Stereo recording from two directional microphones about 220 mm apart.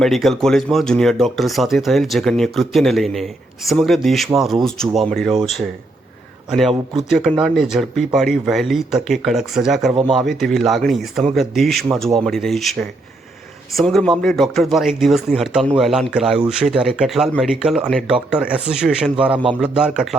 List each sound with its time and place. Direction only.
0.0 s speech: centre (ahead or behind)